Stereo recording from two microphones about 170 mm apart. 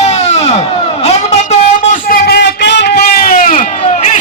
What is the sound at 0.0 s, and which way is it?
Crowd, 40° left (ahead or behind).